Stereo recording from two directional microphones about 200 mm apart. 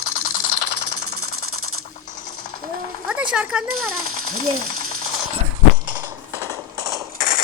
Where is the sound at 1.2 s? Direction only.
90° right.